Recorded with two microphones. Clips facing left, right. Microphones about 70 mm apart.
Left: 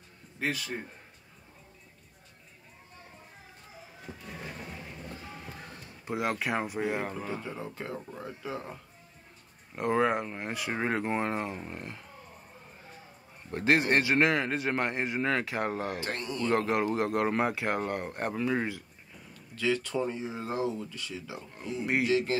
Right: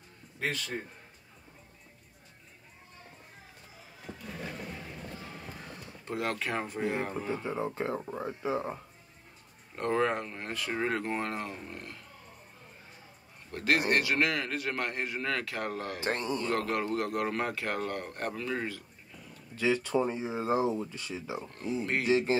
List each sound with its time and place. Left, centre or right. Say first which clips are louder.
0.4 s speech: left 1 dB; centre
6.0 s speech: left 2 dB; centre
7.4 s speech: right 5 dB; right
9.8 s a man's voice: left 2 dB; centre
13.5 s a man's voice: left 2 dB; left
16.0 s speech: right 2 dB; right
16.4 s a man's voice: left 7 dB; left
19.5 s speech: right 2 dB; right